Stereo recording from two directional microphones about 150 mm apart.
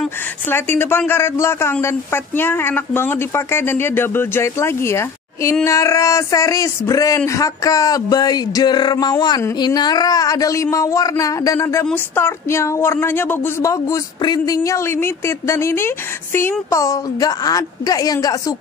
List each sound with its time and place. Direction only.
0.5 s speech: 15° left (ahead or behind)